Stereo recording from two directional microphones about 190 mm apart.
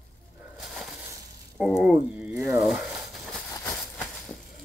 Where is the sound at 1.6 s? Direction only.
5° right (ahead or behind).